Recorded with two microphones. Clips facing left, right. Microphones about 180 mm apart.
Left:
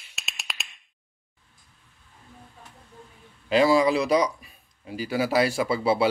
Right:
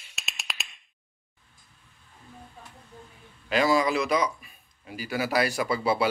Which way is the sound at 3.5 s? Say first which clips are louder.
Left 4 dB; 30° left (ahead or behind).